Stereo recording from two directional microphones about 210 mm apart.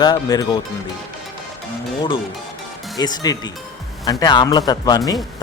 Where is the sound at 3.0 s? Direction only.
20° left (ahead or behind).